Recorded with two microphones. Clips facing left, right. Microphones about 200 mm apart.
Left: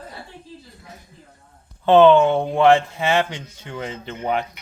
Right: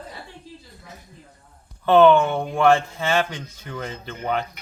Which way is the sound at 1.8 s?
20° left (ahead or behind).